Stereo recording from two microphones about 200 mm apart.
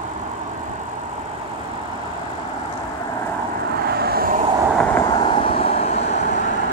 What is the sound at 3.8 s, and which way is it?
Vehicle, 50° right (ahead or behind).